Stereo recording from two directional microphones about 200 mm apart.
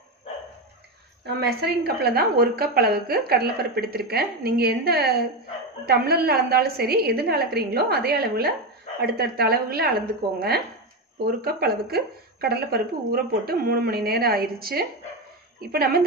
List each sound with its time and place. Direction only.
1.2 s a woman's voice: 55° right (ahead or behind)